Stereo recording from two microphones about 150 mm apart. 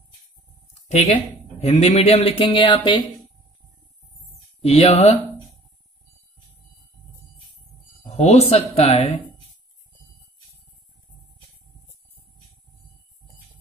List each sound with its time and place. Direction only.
1.6 s speech: 45° left (ahead or behind); by 3.1 s 30° left (ahead or behind)
4.6 s speech: 40° left (ahead or behind)
8.0 s speech: 45° left (ahead or behind)